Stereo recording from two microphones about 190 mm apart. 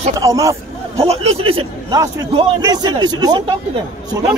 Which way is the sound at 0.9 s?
30° right (ahead or behind).